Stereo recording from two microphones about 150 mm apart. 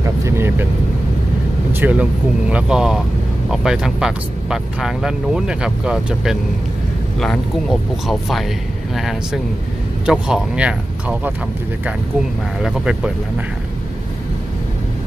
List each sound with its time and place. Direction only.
0.0 s vehicle: 20° right (ahead or behind)
1.8 s speech: 10° right (ahead or behind)
8.1 s speech: centre (ahead or behind)
12.6 s speech: 5° right (ahead or behind)